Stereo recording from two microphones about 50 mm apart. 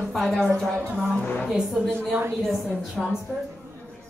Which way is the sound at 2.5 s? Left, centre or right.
Centre.